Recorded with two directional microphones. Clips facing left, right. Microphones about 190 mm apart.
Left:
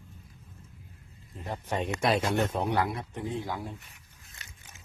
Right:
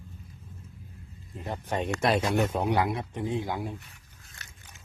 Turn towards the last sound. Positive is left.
turn(degrees=-15)  # may be behind; listen again after turning